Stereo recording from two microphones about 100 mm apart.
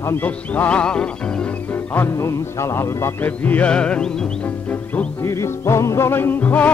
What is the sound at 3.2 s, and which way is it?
Speech, 20° left (ahead or behind).